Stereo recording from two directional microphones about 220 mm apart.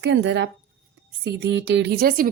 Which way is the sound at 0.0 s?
55° right (ahead or behind).